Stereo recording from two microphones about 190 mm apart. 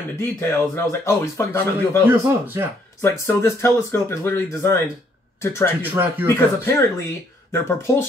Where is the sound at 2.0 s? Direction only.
10° right (ahead or behind).